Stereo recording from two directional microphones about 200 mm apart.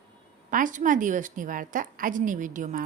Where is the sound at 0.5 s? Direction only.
40° right (ahead or behind).